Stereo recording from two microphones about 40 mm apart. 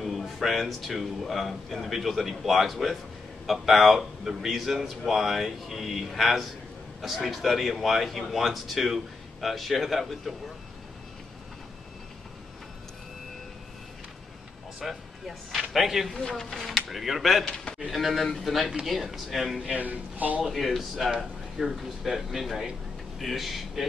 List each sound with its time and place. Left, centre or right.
0.0 s speech: centre
14.8 s a sound: centre
16.1 s a man's voice: centre
16.6 s speech: centre
19.8 s speech: right
20.4 s speech: centre